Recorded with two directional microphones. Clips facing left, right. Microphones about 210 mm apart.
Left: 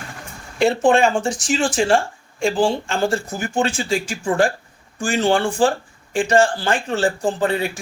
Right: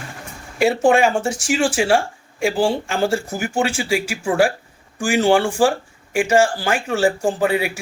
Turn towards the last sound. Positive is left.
turn(degrees=-10)  # may be behind; listen again after turning